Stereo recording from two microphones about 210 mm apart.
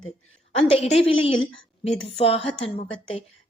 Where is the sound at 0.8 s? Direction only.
30° left (ahead or behind).